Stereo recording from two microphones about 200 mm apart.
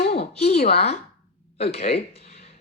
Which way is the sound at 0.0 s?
30° left (ahead or behind).